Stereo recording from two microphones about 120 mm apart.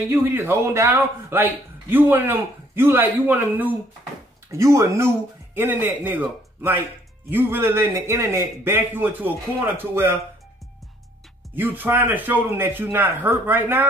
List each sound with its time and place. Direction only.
0.1 s a man's voice: 20° right (ahead or behind)
4.5 s a man's voice: 25° right (ahead or behind)
11.5 s a man's voice: 15° right (ahead or behind)